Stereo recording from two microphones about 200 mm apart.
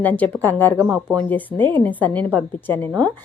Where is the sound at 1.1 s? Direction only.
10° left (ahead or behind).